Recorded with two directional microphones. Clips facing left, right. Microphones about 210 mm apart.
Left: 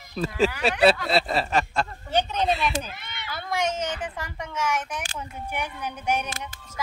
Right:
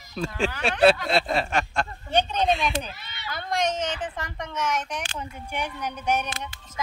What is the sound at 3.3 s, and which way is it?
Speech, 10° left (ahead or behind).